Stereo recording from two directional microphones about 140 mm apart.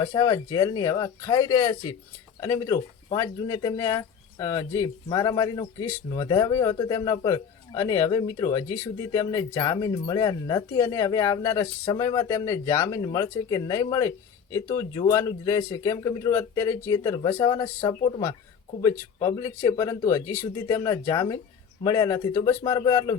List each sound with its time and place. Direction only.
0.0 s speech: 30° left (ahead or behind)